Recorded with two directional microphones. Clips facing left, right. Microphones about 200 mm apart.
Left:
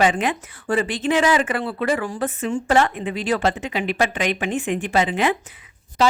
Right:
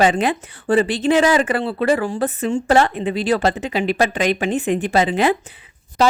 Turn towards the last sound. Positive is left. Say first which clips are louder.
# right 2 dB
turn(degrees=-40)  # may be behind; listen again after turning